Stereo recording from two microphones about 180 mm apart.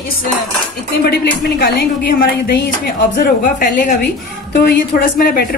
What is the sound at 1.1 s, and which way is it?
A woman's voice, 60° left (ahead or behind).